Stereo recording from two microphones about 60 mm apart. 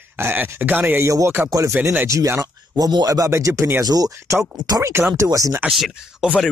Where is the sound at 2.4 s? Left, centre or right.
Right.